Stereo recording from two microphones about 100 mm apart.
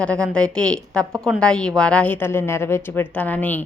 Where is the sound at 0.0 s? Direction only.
10° left (ahead or behind).